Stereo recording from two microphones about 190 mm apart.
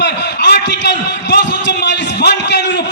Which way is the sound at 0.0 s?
60° left (ahead or behind).